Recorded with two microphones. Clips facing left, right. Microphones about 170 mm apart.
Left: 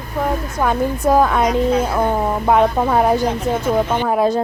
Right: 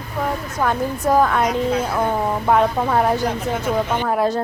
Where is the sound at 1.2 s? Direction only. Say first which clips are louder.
Left 3 dB; 10° left (ahead or behind).